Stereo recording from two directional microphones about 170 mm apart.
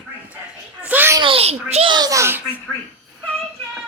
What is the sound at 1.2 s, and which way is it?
A child's voice, 35° right (ahead or behind).